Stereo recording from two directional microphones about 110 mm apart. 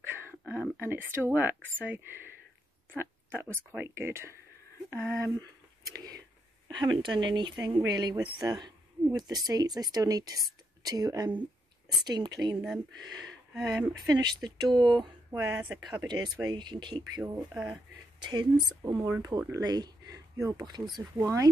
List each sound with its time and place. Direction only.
0.0 s speech: 20° right (ahead or behind)
3.0 s speech: 20° right (ahead or behind); by 12.5 s 40° right (ahead or behind)
13.6 s speech: 5° right (ahead or behind)
14.0 s speech: 40° right (ahead or behind)
18.2 s speech: 40° right (ahead or behind)
18.9 s speech: 20° right (ahead or behind)
19.2 s speech: 35° right (ahead or behind)
21.2 s speech: 30° right (ahead or behind)